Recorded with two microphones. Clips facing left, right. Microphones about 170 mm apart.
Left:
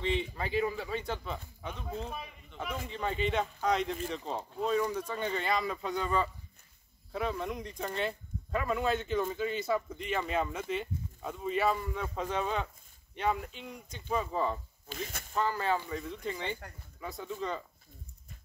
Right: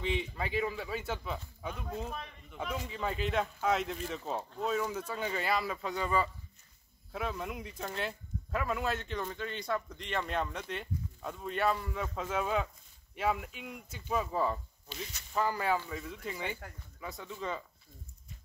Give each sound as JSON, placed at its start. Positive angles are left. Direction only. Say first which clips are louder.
{"t": 0.0, "sound": "speech", "louder": "left 2 dB", "side_deg": 0}
{"t": 14.9, "sound": "speech", "louder": "left 4 dB", "side_deg": 50}
{"t": 15.3, "sound": "speech", "louder": "even", "side_deg": -10}